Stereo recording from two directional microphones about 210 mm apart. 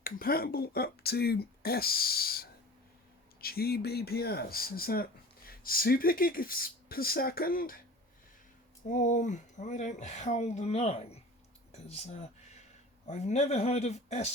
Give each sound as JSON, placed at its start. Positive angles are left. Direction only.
{"t": 0.0, "sound": "speech", "side_deg": 45}
{"t": 8.9, "sound": "speech", "side_deg": 35}